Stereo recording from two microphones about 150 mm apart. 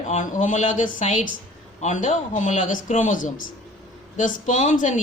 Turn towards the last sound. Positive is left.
turn(degrees=55)  # may be behind; listen again after turning